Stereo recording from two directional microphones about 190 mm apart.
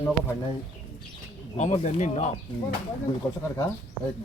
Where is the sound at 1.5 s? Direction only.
40° left (ahead or behind).